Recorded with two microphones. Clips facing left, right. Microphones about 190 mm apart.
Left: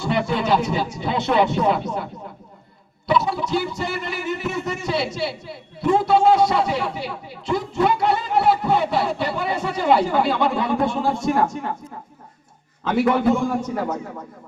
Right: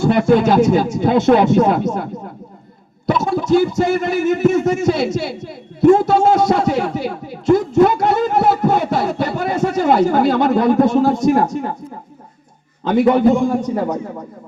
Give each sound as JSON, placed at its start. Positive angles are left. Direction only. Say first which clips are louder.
{"t": 0.0, "sound": "speech", "louder": "right 9 dB", "side_deg": -50}
{"t": 3.1, "sound": "speech", "louder": "right 6 dB", "side_deg": -45}
{"t": 13.3, "sound": "a man's voice", "louder": "right 5 dB", "side_deg": -15}